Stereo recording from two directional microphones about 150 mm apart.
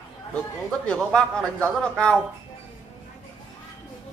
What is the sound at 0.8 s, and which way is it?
A man's voice, 5° left (ahead or behind).